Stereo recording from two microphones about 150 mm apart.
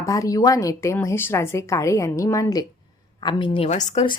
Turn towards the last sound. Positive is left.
turn(degrees=50)  # may be behind; listen again after turning